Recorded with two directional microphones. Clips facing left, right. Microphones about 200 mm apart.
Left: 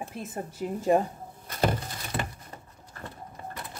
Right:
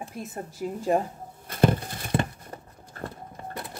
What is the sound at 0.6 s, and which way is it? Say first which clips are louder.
Speech: left 1 dB; centre (ahead or behind).